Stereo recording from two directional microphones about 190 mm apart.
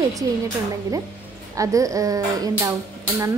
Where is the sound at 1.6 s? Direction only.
15° right (ahead or behind).